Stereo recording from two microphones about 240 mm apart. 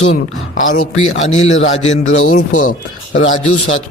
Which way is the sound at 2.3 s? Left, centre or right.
Left.